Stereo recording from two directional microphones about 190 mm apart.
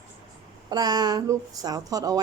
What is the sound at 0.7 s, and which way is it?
Speech, 20° right (ahead or behind).